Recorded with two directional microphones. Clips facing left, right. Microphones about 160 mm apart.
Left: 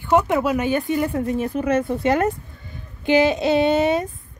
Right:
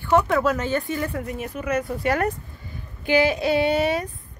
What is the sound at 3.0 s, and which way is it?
Female singing, 20° left (ahead or behind).